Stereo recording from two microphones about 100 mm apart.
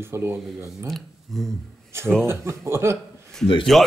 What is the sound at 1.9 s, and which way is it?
Speech, 25° right (ahead or behind).